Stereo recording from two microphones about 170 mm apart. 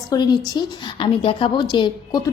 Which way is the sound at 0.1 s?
25° left (ahead or behind).